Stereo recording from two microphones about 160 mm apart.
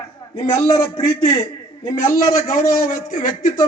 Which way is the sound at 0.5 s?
20° left (ahead or behind).